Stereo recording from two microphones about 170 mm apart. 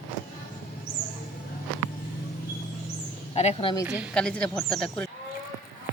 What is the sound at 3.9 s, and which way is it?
Speech, 5° right (ahead or behind).